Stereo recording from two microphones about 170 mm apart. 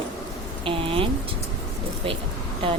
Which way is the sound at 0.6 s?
30° right (ahead or behind).